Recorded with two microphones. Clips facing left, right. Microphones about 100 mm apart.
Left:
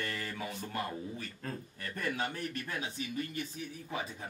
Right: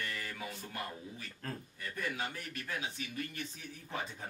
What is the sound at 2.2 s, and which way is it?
Speech, 35° left (ahead or behind).